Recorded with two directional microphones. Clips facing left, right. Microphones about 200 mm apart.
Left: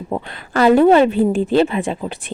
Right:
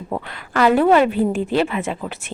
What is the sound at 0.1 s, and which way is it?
Speech, 25° left (ahead or behind).